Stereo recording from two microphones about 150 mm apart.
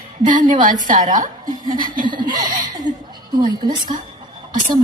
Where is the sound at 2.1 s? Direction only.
30° right (ahead or behind).